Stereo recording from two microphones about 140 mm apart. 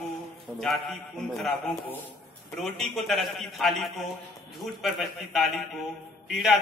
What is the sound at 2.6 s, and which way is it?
A man's voice, centre (ahead or behind).